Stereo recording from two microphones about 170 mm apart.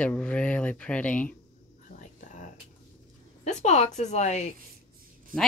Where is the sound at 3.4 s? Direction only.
40° left (ahead or behind).